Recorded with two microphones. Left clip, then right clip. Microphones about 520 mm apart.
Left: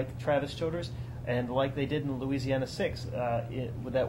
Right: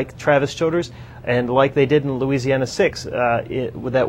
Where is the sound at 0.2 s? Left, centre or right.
Right.